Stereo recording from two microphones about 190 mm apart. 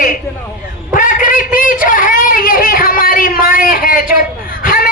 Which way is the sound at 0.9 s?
45° left (ahead or behind).